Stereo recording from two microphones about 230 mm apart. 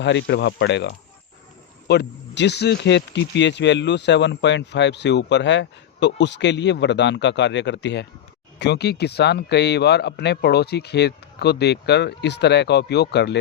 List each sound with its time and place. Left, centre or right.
0.0 s speech: left